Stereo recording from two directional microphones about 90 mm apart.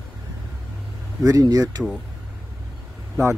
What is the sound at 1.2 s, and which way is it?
Speech, 40° right (ahead or behind).